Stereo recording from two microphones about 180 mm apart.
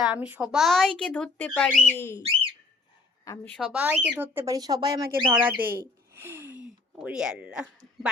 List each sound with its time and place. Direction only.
0.0 s speech: 5° right (ahead or behind); by 2.2 s 15° left (ahead or behind)
3.5 s speech: centre (ahead or behind)
6.1 s a sound: 10° right (ahead or behind)
7.0 s speech: 5° right (ahead or behind)